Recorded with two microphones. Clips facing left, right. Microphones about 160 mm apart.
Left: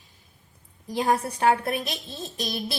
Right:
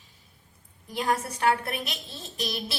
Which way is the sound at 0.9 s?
35° left (ahead or behind).